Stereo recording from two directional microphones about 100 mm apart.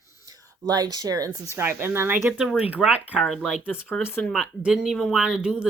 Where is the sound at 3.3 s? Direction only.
Centre (ahead or behind).